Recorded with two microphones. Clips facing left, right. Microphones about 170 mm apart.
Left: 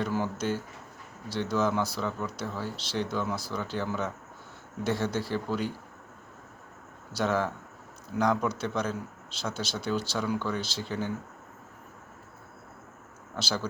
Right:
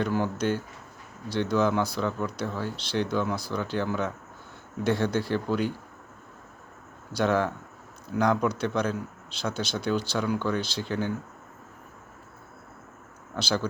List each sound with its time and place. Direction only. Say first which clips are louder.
0.2 s a man's voice: right 3 dB; 5° left (ahead or behind)
7.1 s a man's voice: right 3 dB; 5° left (ahead or behind)
8.1 s speech: right 2 dB; 60° right (ahead or behind)
8.4 s a man's voice: right 4 dB; centre (ahead or behind)
13.3 s a man's voice: right 4 dB; centre (ahead or behind)